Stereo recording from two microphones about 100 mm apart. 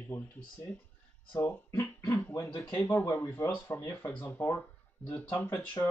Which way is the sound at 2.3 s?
30° left (ahead or behind).